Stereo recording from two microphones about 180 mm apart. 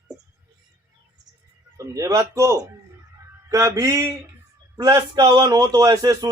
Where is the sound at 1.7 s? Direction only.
15° right (ahead or behind).